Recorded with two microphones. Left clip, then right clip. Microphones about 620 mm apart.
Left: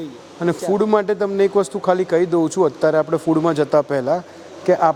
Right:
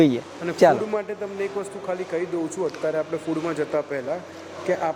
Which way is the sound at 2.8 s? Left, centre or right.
Left.